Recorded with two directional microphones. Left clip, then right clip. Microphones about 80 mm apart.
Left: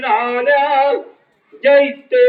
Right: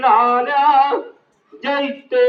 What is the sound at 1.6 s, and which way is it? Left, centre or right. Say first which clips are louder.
Speech: left 9 dB; right.